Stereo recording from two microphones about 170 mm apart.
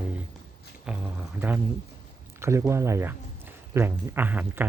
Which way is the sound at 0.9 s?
5° right (ahead or behind).